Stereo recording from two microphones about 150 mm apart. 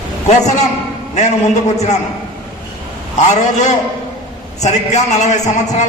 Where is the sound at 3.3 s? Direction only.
50° left (ahead or behind).